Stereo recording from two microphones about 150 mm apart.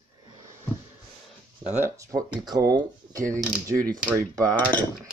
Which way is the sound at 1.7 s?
20° right (ahead or behind).